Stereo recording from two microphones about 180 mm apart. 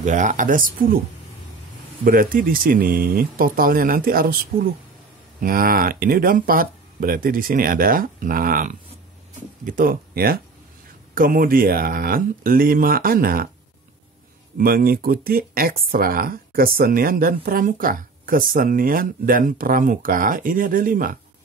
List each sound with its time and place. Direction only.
0.0 s speech: 45° right (ahead or behind)
2.0 s speech: 50° right (ahead or behind)
14.6 s speech: 55° right (ahead or behind)